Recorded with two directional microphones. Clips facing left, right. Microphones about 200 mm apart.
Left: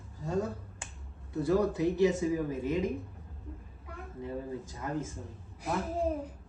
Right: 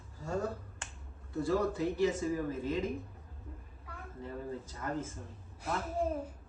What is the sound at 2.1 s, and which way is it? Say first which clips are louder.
Speech: left 3 dB; 15° left (ahead or behind).